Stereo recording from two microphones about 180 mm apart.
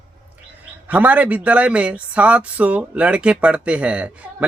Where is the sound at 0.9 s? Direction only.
10° right (ahead or behind).